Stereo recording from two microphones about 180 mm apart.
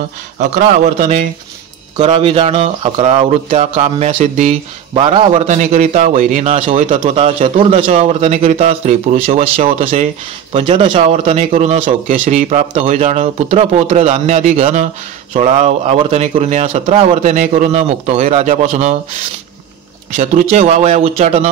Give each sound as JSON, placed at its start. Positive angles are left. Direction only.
{"t": 0.4, "sound": "a man's voice", "side_deg": -45}
{"t": 20.2, "sound": "a man's voice", "side_deg": -45}